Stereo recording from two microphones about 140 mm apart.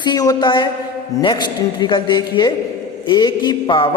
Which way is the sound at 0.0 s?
30° left (ahead or behind).